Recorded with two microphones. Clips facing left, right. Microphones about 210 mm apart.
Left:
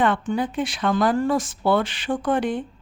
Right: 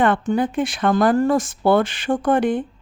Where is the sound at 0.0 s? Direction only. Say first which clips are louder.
Right 3 dB; 50° right (ahead or behind).